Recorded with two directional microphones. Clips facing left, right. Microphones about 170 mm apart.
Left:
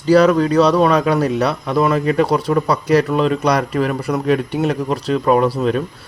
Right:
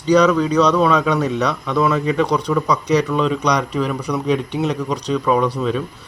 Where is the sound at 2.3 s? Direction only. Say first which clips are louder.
Left 2 dB; 40° left (ahead or behind).